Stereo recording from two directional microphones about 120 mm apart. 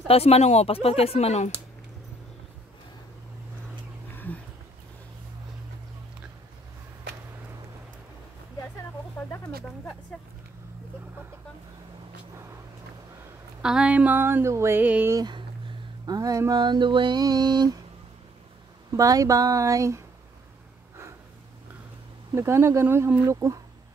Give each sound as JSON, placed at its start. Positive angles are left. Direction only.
{"t": 0.1, "sound": "speech", "side_deg": 60}
{"t": 4.1, "sound": "roaring cats", "side_deg": 15}
{"t": 13.6, "sound": "a sound", "side_deg": -5}
{"t": 15.1, "sound": "a sound", "side_deg": -35}
{"t": 18.9, "sound": "speech", "side_deg": -30}
{"t": 22.3, "sound": "speech", "side_deg": -25}